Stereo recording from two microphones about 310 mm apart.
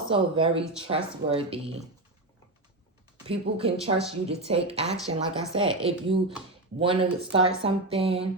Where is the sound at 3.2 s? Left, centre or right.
Centre.